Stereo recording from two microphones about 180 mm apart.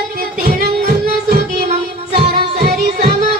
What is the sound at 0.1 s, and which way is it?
Music, 55° right (ahead or behind).